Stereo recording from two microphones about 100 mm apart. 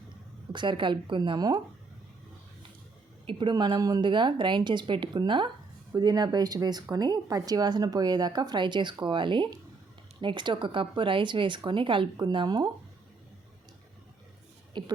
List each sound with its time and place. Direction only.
0.5 s speech: 50° right (ahead or behind)
3.2 s speech: 50° right (ahead or behind)
14.7 s speech: 45° right (ahead or behind)